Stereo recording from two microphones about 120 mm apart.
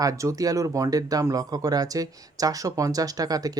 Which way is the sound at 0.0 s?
30° right (ahead or behind).